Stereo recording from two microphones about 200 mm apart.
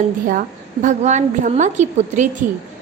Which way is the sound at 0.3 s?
40° right (ahead or behind).